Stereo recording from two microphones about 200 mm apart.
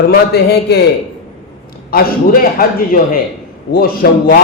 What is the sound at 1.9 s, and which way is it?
A man's voice, 45° left (ahead or behind).